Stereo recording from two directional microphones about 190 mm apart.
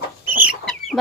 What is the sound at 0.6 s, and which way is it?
Chicken, centre (ahead or behind).